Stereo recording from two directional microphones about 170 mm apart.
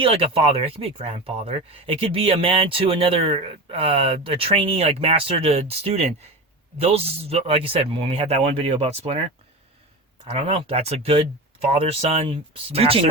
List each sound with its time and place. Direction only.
0.0 s speech: 35° right (ahead or behind)
10.3 s speech: 35° right (ahead or behind)